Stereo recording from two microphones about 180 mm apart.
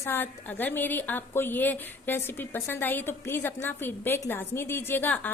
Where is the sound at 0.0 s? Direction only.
10° left (ahead or behind).